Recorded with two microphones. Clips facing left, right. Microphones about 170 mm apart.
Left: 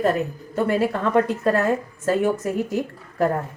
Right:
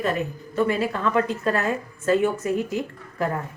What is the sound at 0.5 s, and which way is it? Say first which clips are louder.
A woman's voice: left 2 dB; 45° left (ahead or behind).